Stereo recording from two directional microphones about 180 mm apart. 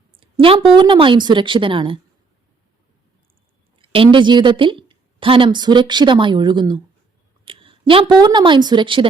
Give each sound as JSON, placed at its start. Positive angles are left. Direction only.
{"t": 0.2, "sound": "speech", "side_deg": -30}
{"t": 3.8, "sound": "a woman's voice", "side_deg": -30}